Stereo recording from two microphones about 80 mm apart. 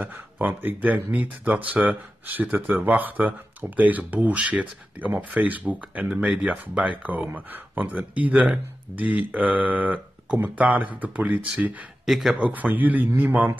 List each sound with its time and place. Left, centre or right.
0.0 s speech: right
12.1 s speech: centre
12.4 s speech: right